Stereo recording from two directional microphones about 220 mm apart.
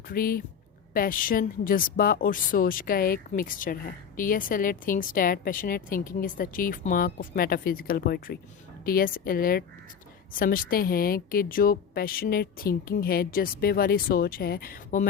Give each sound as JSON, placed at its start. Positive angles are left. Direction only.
{"t": 0.1, "sound": "a woman's voice", "side_deg": 40}